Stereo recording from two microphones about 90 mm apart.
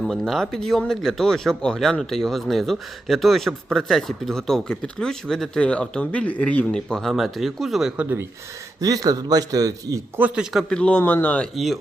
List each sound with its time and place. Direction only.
0.0 s speech: centre (ahead or behind)
8.8 s a man's voice: 45° right (ahead or behind)
10.2 s a man's voice: 15° right (ahead or behind)
10.5 s speech: centre (ahead or behind)
10.8 s speech: 15° left (ahead or behind)
11.5 s speech: centre (ahead or behind)